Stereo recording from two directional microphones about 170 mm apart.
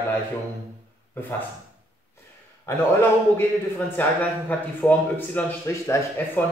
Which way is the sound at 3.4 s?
10° left (ahead or behind).